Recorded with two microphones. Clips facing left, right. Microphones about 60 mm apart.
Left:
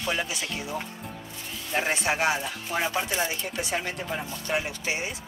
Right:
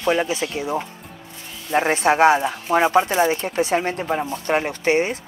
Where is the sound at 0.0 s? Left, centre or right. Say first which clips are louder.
Right 9 dB; right.